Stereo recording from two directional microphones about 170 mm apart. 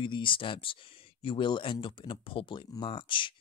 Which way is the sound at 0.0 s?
30° left (ahead or behind).